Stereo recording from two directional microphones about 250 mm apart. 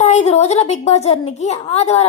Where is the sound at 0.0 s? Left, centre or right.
Left.